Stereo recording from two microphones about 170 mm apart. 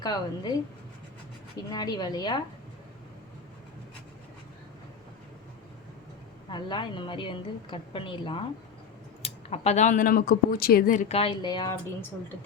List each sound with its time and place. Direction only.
0.0 s a woman's voice: 25° left (ahead or behind)
1.7 s a woman's voice: 25° left (ahead or behind)
6.5 s a woman's voice: 30° left (ahead or behind); by 11.0 s 55° left (ahead or behind)
11.1 s a woman's voice: 35° left (ahead or behind)